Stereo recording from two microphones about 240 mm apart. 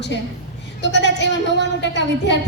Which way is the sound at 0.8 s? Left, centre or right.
Left.